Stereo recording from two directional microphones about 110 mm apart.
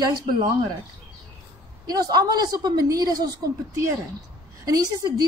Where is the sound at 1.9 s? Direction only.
35° right (ahead or behind).